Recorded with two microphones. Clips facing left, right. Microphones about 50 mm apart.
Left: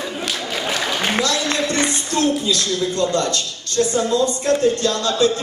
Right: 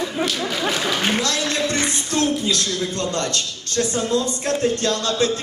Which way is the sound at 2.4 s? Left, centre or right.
Right.